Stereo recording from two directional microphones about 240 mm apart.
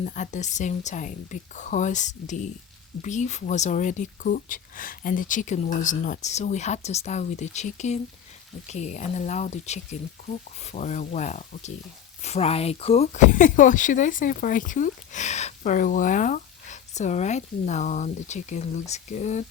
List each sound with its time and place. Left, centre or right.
0.0 s speech: left